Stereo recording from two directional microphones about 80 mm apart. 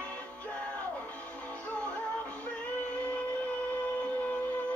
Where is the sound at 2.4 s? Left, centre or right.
Centre.